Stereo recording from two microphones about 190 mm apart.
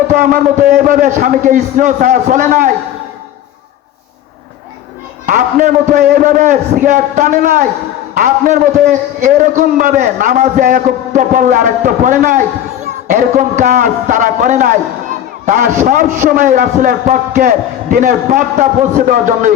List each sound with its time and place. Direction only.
0.1 s a man's voice: 45° right (ahead or behind)
5.2 s a man's voice: 45° right (ahead or behind)